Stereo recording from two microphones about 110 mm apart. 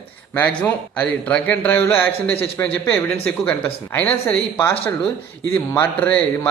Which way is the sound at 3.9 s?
15° left (ahead or behind).